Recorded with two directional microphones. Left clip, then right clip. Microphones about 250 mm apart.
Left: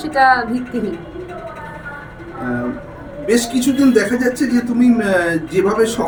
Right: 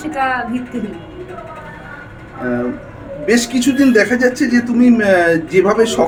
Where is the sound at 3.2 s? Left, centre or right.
Centre.